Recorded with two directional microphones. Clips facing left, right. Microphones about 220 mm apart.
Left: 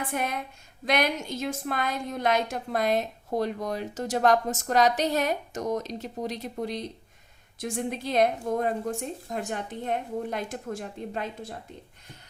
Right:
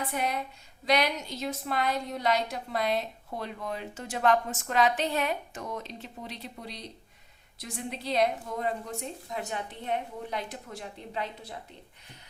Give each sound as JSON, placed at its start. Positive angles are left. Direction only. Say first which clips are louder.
{"t": 0.1, "sound": "a woman's voice", "louder": "left 1 dB", "side_deg": 50}